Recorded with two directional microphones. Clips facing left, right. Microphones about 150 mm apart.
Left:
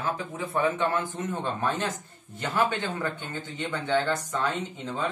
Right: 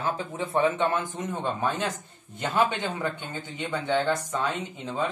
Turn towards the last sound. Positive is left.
turn(degrees=-10)  # may be behind; listen again after turning